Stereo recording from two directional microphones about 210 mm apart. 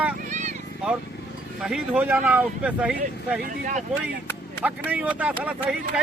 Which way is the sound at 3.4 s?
40° right (ahead or behind).